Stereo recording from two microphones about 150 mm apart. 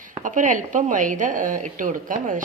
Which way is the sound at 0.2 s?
60° right (ahead or behind).